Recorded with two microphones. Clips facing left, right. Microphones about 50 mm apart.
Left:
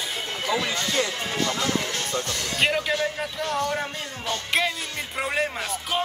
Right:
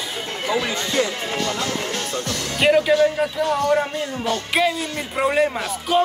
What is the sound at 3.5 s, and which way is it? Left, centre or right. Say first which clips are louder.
Speech: right 7 dB; right.